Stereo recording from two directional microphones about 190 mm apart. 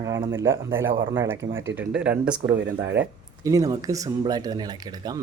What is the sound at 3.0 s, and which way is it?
Speech, 15° right (ahead or behind).